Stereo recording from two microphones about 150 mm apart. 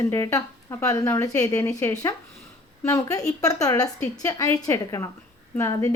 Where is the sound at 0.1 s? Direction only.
20° left (ahead or behind).